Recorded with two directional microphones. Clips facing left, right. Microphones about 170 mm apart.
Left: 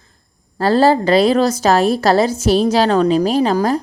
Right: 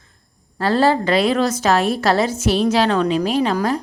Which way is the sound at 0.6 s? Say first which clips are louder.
Left 4 dB; 35° left (ahead or behind).